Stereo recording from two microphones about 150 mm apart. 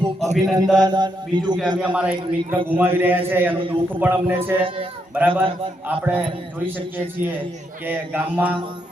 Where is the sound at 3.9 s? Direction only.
15° right (ahead or behind).